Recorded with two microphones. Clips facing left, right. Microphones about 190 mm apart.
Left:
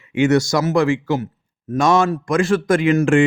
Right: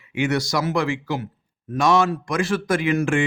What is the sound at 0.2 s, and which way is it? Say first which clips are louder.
A man's voice: left 6 dB; 45° left (ahead or behind).